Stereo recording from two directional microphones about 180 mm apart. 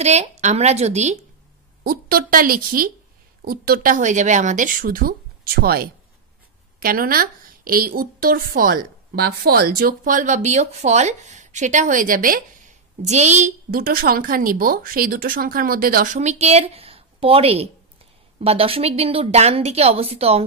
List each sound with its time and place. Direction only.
0.0 s speech: 40° right (ahead or behind)
1.8 s a woman's voice: 55° right (ahead or behind); by 20.4 s 35° right (ahead or behind)